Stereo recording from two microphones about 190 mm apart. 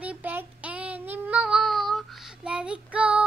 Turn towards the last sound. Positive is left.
turn(degrees=-5)  # may be behind; listen again after turning